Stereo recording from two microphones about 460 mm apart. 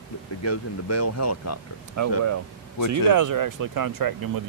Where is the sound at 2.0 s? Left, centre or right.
Right.